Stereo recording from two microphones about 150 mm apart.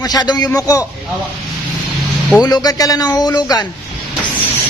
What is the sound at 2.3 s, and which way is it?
Speech, 25° left (ahead or behind).